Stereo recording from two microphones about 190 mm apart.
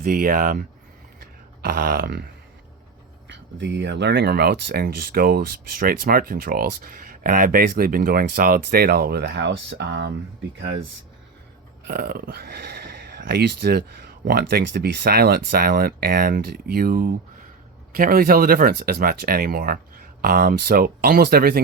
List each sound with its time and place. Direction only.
0.0 s speech: 50° right (ahead or behind)
1.2 s grunt: 55° right (ahead or behind)
3.6 s speech: 65° right (ahead or behind)
11.9 s speech: 55° right (ahead or behind)